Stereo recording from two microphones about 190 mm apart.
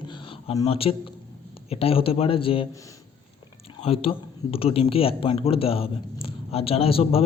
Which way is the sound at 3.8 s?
30° left (ahead or behind).